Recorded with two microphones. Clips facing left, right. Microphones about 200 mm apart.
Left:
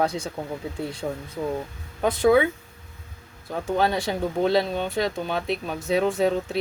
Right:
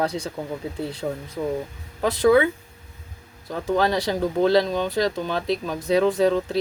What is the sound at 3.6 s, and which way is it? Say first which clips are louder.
Speech: right 2 dB; 90° right.